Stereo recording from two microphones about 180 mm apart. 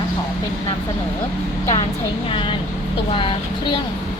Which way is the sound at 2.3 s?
30° left (ahead or behind).